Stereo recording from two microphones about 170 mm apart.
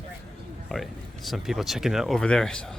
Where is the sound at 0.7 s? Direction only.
Centre (ahead or behind).